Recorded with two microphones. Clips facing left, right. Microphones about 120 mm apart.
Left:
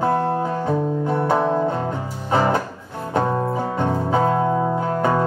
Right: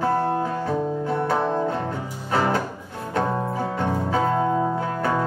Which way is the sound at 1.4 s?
10° left (ahead or behind).